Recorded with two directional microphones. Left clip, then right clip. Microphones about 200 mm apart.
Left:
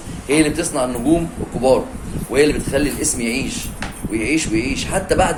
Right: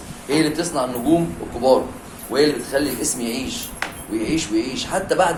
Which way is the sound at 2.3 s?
30° left (ahead or behind).